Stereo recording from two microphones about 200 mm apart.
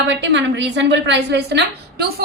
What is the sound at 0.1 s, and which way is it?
A woman's voice, 60° right (ahead or behind).